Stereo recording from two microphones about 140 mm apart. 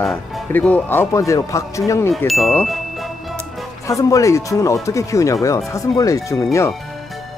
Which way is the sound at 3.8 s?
25° left (ahead or behind).